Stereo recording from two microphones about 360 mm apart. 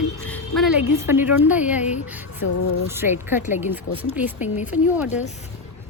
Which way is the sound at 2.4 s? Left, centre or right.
Left.